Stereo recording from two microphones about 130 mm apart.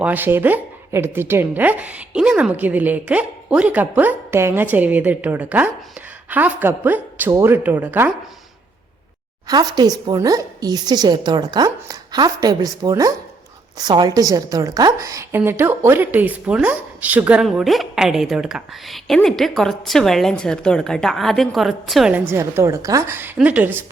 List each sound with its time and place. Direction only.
0.0 s speech: 15° right (ahead or behind)
9.5 s a woman's voice: 30° right (ahead or behind); by 17.4 s 10° right (ahead or behind)
17.4 s a woman's voice: centre (ahead or behind)
22.3 s speech: 20° right (ahead or behind)